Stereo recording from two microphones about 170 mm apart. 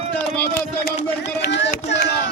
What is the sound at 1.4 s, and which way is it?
Speech, 90° left.